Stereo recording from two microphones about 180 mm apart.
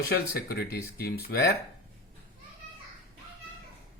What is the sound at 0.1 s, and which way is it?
Speech, 60° left (ahead or behind).